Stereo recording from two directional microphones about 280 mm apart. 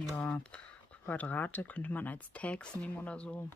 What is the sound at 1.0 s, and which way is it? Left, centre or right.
Speech, centre.